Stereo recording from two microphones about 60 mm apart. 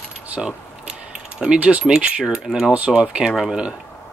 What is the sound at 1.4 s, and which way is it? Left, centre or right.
Speech, centre.